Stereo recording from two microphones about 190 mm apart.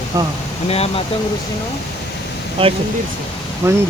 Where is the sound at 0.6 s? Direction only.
35° left (ahead or behind).